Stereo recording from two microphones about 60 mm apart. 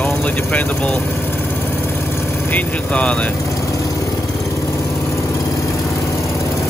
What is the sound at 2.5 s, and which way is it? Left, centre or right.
Speech, left.